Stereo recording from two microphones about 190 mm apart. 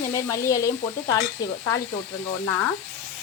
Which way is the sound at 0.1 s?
15° left (ahead or behind).